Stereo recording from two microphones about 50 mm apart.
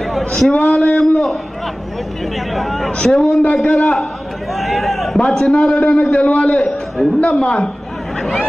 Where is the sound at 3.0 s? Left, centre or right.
Centre.